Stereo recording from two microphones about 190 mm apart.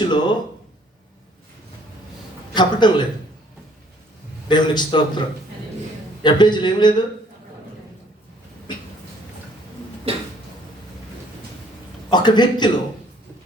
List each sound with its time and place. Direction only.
0.1 s speech: 25° left (ahead or behind)
2.6 s a man's voice: 25° left (ahead or behind)
4.4 s a man's voice: 25° left (ahead or behind)
6.2 s a man's voice: 25° left (ahead or behind)
10.1 s a sound: 30° right (ahead or behind)
12.1 s a man's voice: 25° left (ahead or behind)